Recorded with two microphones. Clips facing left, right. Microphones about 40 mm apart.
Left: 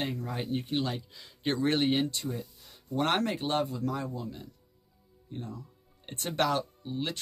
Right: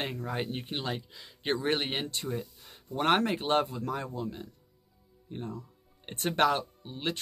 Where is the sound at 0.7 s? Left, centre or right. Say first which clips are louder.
Left 3 dB; centre.